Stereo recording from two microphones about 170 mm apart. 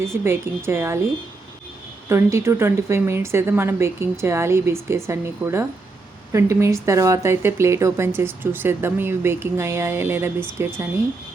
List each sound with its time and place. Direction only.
0.0 s speech: 15° right (ahead or behind)
2.0 s speech: 15° right (ahead or behind)